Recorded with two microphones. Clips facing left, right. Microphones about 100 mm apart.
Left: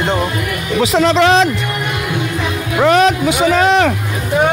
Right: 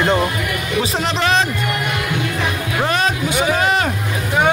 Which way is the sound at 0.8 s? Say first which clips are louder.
Left 9 dB; 90° left.